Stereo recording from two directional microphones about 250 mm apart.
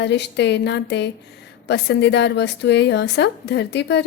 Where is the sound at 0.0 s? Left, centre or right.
Left.